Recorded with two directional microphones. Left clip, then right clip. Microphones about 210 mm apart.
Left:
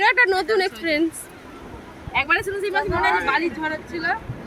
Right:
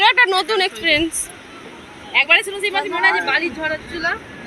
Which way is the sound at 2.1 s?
55° left (ahead or behind).